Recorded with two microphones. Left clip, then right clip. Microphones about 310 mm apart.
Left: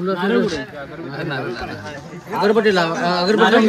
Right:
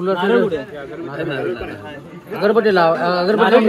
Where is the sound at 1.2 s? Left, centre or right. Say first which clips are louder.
Right 2 dB; right.